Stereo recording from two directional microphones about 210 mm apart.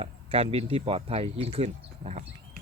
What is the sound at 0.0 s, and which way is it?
Speech, 25° right (ahead or behind).